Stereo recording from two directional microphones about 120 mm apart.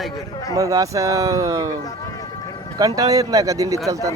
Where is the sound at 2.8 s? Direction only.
30° right (ahead or behind).